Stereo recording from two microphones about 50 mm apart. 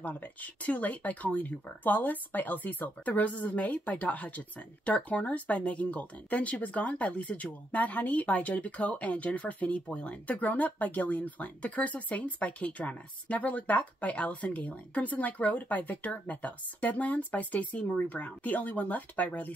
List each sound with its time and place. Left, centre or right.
0.0 s speech: left